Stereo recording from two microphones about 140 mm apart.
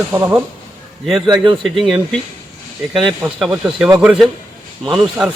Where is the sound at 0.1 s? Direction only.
15° right (ahead or behind).